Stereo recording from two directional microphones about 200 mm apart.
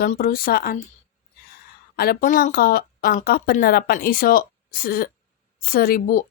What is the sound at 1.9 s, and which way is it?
Speech, 50° left (ahead or behind).